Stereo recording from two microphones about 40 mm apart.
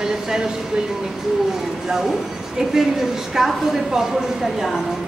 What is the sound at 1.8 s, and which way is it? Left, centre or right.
Speech, centre.